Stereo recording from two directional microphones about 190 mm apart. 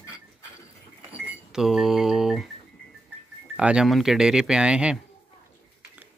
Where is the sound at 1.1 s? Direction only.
5° right (ahead or behind).